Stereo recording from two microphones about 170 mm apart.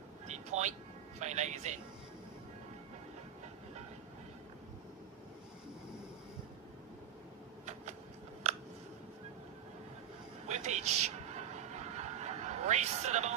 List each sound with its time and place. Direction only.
0.3 s vehicle: 45° right (ahead or behind)
1.2 s a man's voice: 40° right (ahead or behind)
7.6 s vehicle: 40° right (ahead or behind)
10.4 s a sound: 45° right (ahead or behind)